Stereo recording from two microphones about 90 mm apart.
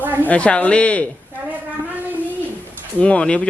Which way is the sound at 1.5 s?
20° right (ahead or behind).